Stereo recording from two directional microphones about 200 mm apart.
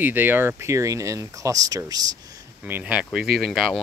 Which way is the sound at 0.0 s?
10° right (ahead or behind).